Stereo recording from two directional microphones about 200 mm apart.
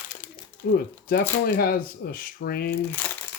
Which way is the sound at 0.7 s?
50° left (ahead or behind).